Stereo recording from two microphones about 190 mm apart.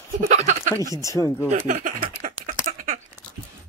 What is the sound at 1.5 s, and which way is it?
Speech, 40° right (ahead or behind).